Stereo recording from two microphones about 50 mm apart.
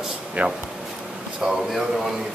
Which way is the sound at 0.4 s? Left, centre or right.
Right.